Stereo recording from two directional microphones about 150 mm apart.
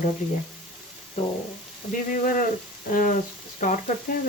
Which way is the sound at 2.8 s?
65° left (ahead or behind).